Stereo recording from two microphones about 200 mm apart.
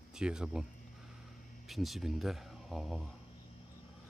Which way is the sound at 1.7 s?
Centre (ahead or behind).